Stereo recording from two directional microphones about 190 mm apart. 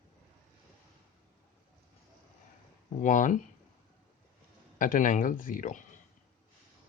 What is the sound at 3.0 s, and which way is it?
Speech, 40° left (ahead or behind).